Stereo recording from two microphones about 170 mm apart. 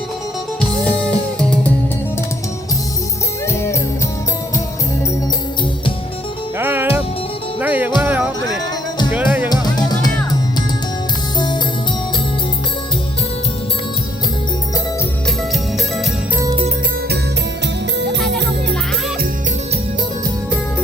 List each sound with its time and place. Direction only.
0.9 s music: 5° left (ahead or behind)
3.5 s music: 15° left (ahead or behind)
6.6 s music: 10° right (ahead or behind)
9.5 s music: 25° left (ahead or behind)